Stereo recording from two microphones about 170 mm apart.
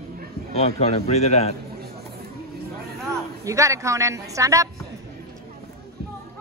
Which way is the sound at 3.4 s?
20° right (ahead or behind).